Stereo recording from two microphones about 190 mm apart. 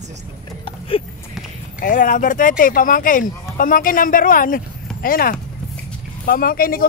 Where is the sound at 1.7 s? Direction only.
45° left (ahead or behind).